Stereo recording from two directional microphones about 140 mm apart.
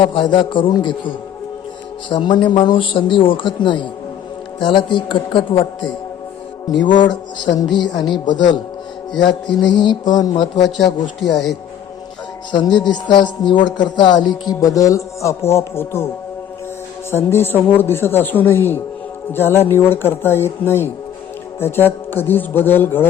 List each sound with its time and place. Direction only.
0.0 s a man's voice: 35° left (ahead or behind)
2.0 s a man's voice: 35° left (ahead or behind)
9.2 s a man's voice: 35° left (ahead or behind)
11.2 s speech: centre (ahead or behind)
12.5 s speech: 30° left (ahead or behind); by 16.0 s 15° left (ahead or behind)
17.3 s speech: 15° left (ahead or behind)